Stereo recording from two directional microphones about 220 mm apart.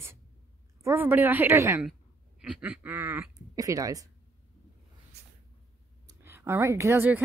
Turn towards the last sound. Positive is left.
turn(degrees=-10)  # may be behind; listen again after turning